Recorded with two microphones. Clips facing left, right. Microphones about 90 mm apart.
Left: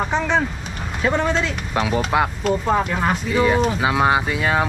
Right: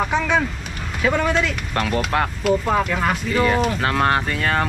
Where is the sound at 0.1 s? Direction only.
20° left (ahead or behind).